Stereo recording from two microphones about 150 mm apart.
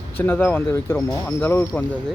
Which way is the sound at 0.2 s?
15° left (ahead or behind).